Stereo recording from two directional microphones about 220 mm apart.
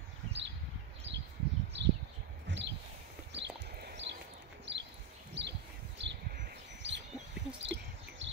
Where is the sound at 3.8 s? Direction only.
50° right (ahead or behind).